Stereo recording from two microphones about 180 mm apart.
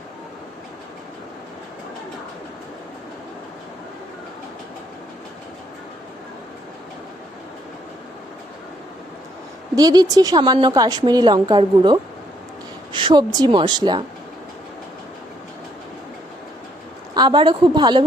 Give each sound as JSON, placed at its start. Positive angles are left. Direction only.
{"t": 9.7, "sound": "a woman's voice", "side_deg": -20}
{"t": 17.2, "sound": "a woman's voice", "side_deg": -25}